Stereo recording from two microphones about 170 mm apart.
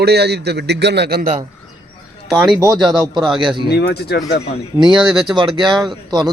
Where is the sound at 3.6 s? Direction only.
75° left (ahead or behind).